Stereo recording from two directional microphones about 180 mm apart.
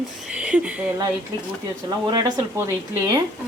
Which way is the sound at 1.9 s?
25° right (ahead or behind).